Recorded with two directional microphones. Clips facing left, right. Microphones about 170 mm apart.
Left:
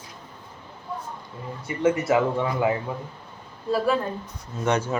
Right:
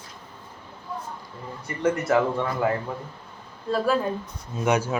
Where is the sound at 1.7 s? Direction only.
Centre (ahead or behind).